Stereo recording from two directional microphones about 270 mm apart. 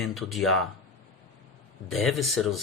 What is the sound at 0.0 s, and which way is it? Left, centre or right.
Speech, centre.